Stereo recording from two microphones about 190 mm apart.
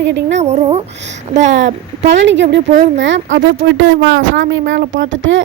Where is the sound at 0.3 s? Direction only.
35° right (ahead or behind).